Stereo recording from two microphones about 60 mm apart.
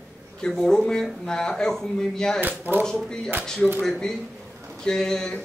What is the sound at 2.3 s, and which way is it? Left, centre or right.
Speech, right.